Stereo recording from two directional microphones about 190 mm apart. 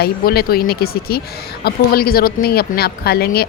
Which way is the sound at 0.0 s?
55° left (ahead or behind).